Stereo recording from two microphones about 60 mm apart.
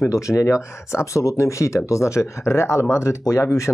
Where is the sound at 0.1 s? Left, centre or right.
Left.